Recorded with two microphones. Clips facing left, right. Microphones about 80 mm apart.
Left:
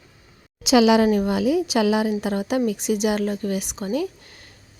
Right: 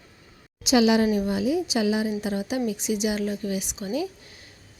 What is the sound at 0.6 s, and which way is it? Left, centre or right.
A woman's voice, left.